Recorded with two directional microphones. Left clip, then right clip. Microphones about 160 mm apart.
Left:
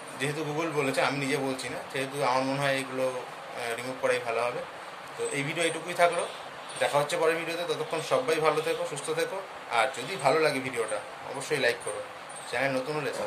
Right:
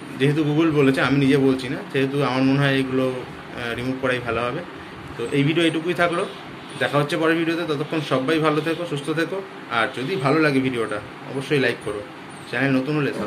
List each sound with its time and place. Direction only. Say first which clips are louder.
0.2 s a man's voice: right 11 dB; 10° left (ahead or behind)